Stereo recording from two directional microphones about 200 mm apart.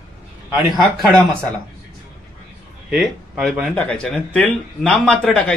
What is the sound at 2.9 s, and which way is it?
Speech, centre (ahead or behind).